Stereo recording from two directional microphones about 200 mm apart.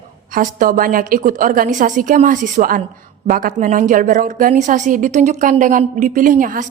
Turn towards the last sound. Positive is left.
turn(degrees=-40)  # may be behind; listen again after turning